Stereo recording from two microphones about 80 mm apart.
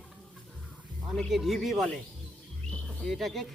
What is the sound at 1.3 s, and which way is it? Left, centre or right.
Speech, centre.